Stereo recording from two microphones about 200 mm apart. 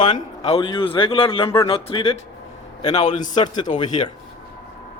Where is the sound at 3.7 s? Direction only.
20° left (ahead or behind).